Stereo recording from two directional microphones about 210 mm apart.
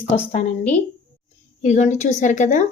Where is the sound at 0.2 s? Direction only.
25° left (ahead or behind).